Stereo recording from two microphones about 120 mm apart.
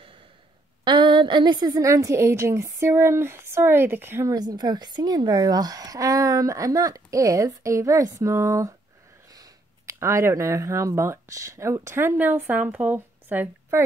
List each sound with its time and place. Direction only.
0.8 s a woman's voice: 40° right (ahead or behind); by 4.3 s 20° right (ahead or behind)
4.3 s a woman's voice: 35° right (ahead or behind)
9.9 s a woman's voice: 25° right (ahead or behind)